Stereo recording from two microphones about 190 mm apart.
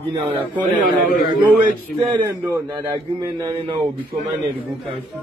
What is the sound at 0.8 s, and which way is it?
Speech, 45° left (ahead or behind).